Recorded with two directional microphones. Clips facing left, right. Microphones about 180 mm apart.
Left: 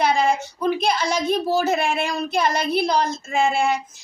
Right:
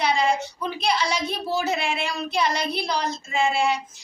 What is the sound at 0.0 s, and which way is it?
A child's voice, 50° left (ahead or behind).